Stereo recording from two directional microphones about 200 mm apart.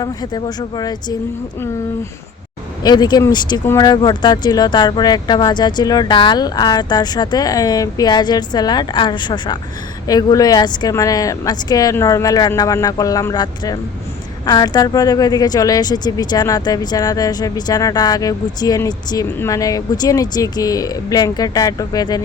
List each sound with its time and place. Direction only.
0.0 s speech: 20° left (ahead or behind)
2.8 s speech: 20° left (ahead or behind)